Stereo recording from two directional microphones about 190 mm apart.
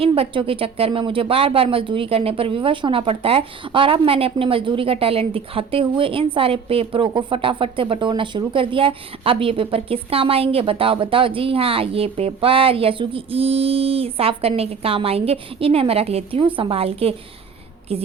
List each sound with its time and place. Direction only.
0.0 s a woman's voice: 30° right (ahead or behind)